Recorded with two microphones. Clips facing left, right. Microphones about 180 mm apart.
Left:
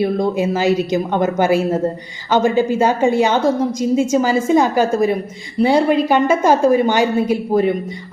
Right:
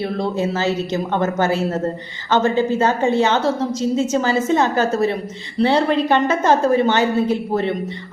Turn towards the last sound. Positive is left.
turn(degrees=10)  # may be behind; listen again after turning